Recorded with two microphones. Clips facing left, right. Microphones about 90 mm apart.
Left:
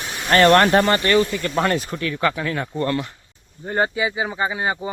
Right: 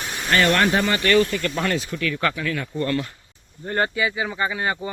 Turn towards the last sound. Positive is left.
turn(degrees=20)  # may be behind; listen again after turning